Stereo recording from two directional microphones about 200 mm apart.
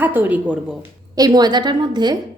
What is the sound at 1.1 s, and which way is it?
A woman's voice, 20° right (ahead or behind).